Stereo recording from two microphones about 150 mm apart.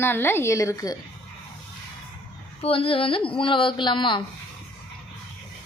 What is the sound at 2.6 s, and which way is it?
A woman's voice, 40° left (ahead or behind).